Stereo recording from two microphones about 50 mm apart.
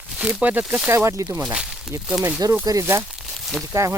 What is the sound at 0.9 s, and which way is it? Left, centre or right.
Speech, right.